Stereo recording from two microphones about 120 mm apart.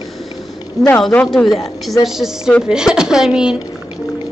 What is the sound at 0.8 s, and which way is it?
Speech, 30° left (ahead or behind).